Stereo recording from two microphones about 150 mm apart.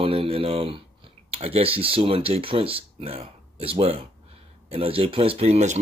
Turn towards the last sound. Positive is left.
turn(degrees=-45)  # may be behind; listen again after turning